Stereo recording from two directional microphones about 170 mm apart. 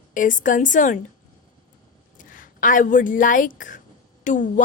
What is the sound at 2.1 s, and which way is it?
A woman's voice, 55° left (ahead or behind).